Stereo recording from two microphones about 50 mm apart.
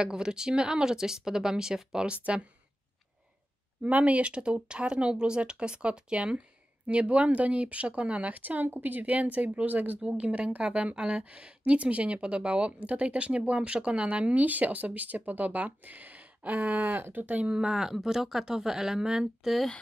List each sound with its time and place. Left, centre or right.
0.0 s speech: centre
3.8 s a woman's voice: right
9.9 s a woman's voice: right
17.5 s speech: centre